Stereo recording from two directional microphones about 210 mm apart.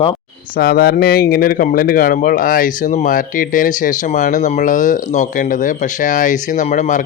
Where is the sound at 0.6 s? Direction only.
45° left (ahead or behind).